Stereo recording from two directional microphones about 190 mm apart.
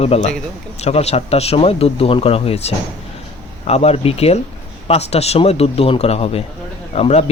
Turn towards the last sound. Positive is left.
turn(degrees=35)  # may be behind; listen again after turning